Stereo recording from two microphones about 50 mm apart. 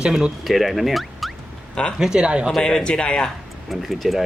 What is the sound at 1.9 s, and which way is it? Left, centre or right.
Speech, centre.